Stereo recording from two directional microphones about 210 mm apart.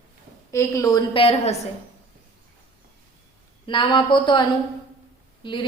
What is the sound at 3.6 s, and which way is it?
A woman's voice, 25° left (ahead or behind).